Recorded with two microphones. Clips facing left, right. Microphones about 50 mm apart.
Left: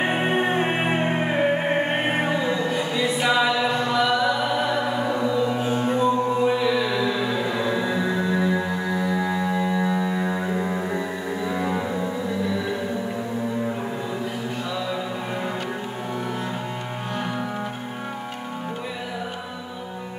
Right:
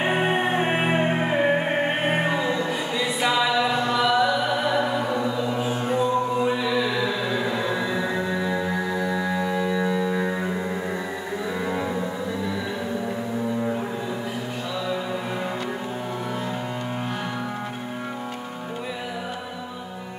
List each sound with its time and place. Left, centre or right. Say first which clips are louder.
0.0 s music: even; centre
11.5 s music: even; centre